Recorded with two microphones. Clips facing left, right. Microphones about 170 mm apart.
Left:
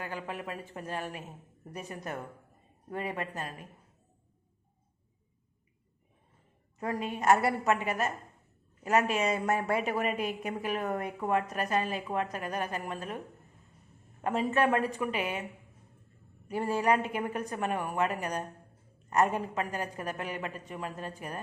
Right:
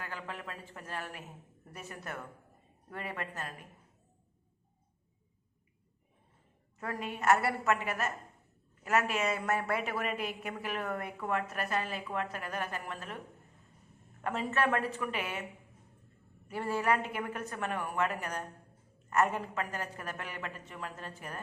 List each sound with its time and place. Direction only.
0.0 s a woman's voice: 15° left (ahead or behind)
6.7 s a woman's voice: 20° left (ahead or behind)
16.5 s a woman's voice: 15° left (ahead or behind)